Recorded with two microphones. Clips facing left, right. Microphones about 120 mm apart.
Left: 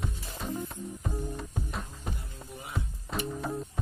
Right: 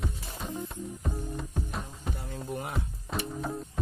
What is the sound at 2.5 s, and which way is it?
Music, 55° right (ahead or behind).